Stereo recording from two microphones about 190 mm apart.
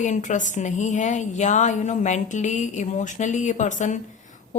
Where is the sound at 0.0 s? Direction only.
40° left (ahead or behind).